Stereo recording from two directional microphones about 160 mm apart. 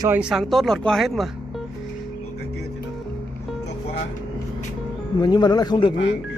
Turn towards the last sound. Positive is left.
turn(degrees=25)  # may be behind; listen again after turning